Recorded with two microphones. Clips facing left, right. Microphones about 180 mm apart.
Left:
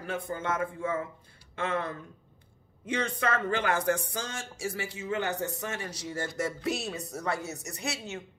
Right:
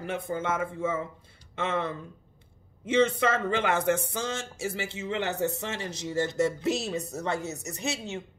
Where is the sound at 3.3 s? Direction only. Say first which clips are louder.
Right 2 dB; 25° right (ahead or behind).